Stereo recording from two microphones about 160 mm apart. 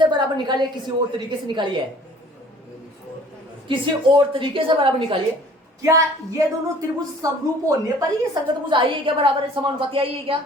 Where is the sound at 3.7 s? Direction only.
30° right (ahead or behind).